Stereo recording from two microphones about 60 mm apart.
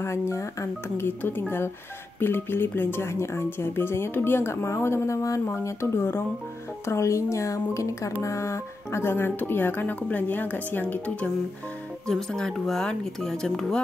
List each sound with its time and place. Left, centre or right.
0.0 s speech: left
6.9 s speech: left
12.1 s speech: centre